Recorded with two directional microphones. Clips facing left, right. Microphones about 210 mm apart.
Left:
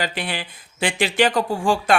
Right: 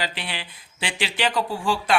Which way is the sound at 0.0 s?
45° left (ahead or behind).